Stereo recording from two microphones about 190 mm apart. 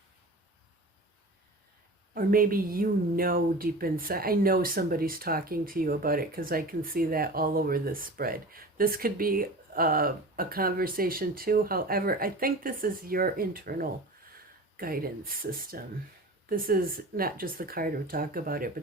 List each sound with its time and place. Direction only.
2.1 s speech: 50° right (ahead or behind)